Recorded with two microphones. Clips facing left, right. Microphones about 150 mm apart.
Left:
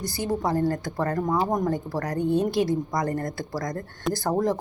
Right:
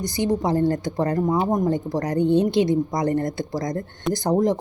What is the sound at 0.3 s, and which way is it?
Speech, 20° right (ahead or behind).